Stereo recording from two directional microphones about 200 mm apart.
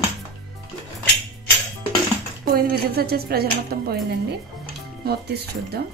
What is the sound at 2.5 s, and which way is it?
Speech, 50° right (ahead or behind).